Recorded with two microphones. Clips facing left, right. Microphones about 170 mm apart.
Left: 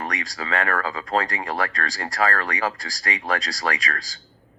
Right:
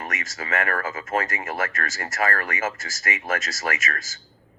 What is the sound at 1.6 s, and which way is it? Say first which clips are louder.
Speech: left 2 dB; 20° right (ahead or behind).